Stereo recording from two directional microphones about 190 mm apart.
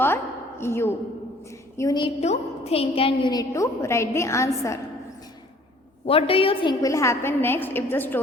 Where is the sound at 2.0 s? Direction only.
35° left (ahead or behind); by 4.8 s 15° left (ahead or behind).